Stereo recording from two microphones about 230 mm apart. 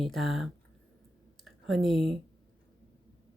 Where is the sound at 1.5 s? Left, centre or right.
Centre.